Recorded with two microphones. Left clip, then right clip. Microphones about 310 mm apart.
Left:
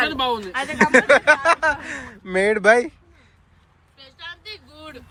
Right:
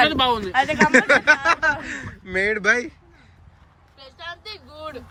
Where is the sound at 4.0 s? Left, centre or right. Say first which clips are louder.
Right 1 dB; centre.